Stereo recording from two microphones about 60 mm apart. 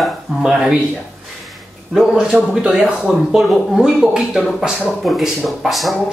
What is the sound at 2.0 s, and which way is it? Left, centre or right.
Speech, centre.